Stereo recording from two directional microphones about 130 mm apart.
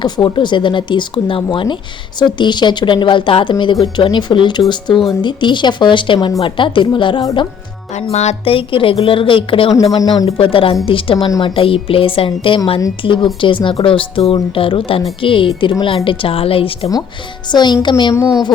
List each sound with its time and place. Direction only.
0.0 s speech: 35° left (ahead or behind)
7.9 s a woman's voice: 60° left (ahead or behind)
10.0 s speech: 30° left (ahead or behind)
10.2 s a woman's voice: 45° left (ahead or behind)
17.5 s speech: 35° left (ahead or behind)